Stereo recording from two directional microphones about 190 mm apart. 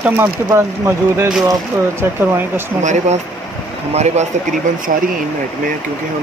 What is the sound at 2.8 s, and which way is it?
Speech, 40° right (ahead or behind).